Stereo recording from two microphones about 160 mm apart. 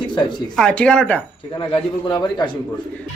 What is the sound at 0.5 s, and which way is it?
Speech, 5° left (ahead or behind).